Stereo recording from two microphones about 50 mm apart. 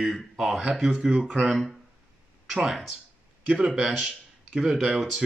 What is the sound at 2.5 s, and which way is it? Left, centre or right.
Speech, centre.